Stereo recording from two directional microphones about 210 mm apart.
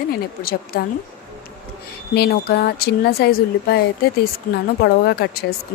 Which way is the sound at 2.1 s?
50° left (ahead or behind).